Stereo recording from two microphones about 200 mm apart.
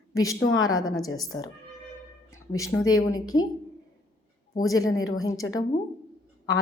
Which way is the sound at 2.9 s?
90° left.